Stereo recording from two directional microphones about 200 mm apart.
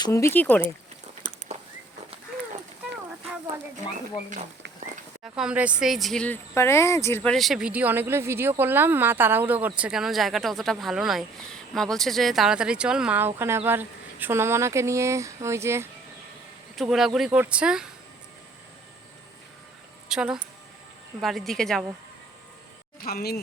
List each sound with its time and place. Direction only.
0.0 s speech: 15° left (ahead or behind)
5.2 s speech: 5° right (ahead or behind)
16.7 s speech: centre (ahead or behind)
20.1 s a woman's voice: 5° right (ahead or behind)
23.0 s speech: 50° left (ahead or behind)